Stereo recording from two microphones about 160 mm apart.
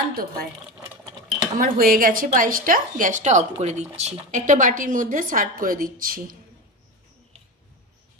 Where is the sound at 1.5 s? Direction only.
60° right (ahead or behind).